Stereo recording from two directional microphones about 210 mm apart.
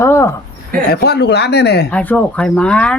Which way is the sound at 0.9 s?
50° left (ahead or behind).